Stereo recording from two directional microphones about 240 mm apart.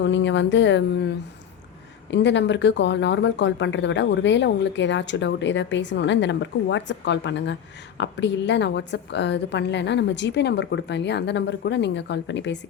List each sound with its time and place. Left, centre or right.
0.0 s speech: left
2.0 s speech: left